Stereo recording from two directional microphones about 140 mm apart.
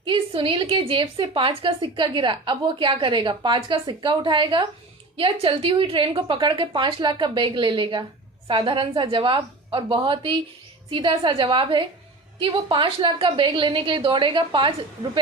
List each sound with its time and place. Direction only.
0.0 s a woman's voice: 35° right (ahead or behind)